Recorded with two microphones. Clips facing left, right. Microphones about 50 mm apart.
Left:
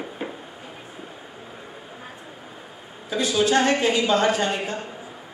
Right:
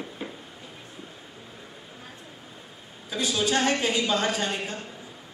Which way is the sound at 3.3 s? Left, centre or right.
Centre.